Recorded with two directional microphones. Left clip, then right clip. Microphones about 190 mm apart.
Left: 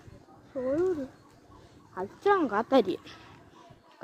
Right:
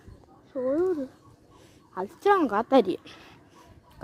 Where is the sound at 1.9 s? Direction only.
55° right (ahead or behind).